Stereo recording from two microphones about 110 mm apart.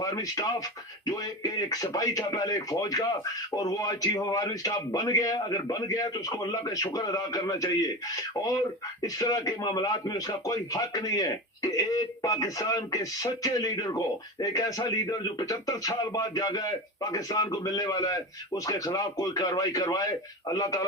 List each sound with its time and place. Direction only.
0.0 s speech: 30° left (ahead or behind)
9.1 s speech: 35° left (ahead or behind)